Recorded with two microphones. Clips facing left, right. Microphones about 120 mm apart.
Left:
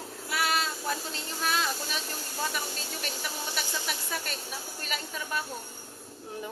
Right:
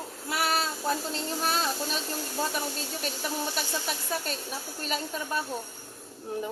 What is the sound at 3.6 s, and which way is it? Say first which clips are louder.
A woman's voice: right 2 dB; 35° right (ahead or behind).